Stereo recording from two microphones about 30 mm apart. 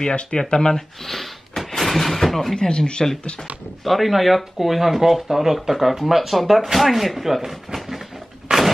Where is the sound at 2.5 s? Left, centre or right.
Left.